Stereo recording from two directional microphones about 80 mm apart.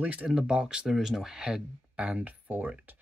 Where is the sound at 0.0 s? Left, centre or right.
Centre.